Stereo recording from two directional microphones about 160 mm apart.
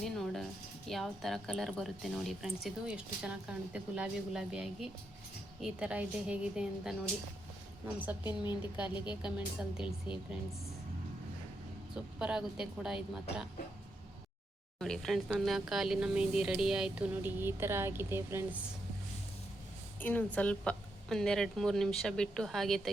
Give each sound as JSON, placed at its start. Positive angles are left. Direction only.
{"t": 0.0, "sound": "a woman's voice", "side_deg": 0}
{"t": 8.2, "sound": "a woman's voice", "side_deg": 30}
{"t": 9.2, "sound": "speech", "side_deg": -5}
{"t": 12.2, "sound": "speech", "side_deg": -5}
{"t": 14.8, "sound": "speech", "side_deg": 0}
{"t": 20.0, "sound": "speech", "side_deg": 10}